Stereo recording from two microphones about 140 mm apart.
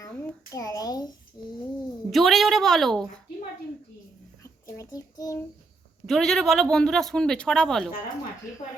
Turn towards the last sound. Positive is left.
turn(degrees=5)  # may be behind; listen again after turning